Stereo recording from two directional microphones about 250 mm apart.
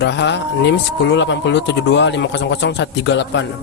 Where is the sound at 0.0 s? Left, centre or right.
Left.